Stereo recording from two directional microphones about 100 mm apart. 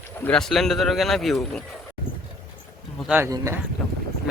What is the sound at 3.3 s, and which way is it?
Speech, 35° right (ahead or behind).